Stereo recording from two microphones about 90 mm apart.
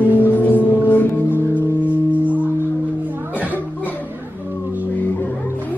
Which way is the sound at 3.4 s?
20° left (ahead or behind).